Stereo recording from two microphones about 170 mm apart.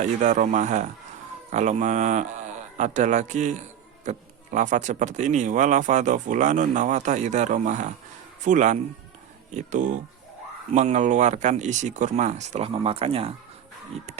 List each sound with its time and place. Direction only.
0.0 s speech: 45° right (ahead or behind)